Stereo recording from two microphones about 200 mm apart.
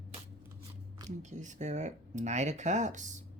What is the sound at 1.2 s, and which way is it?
Speech, 35° right (ahead or behind).